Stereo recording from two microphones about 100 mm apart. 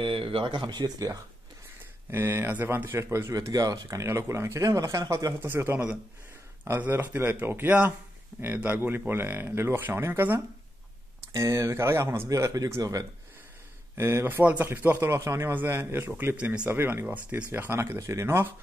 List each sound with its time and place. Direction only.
0.0 s speech: 65° right (ahead or behind); by 1.2 s 40° right (ahead or behind)
2.0 s speech: 20° right (ahead or behind)
5.4 s speech: 20° right (ahead or behind)